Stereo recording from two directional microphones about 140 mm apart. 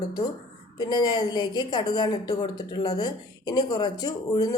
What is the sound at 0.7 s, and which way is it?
A woman's voice, 30° left (ahead or behind).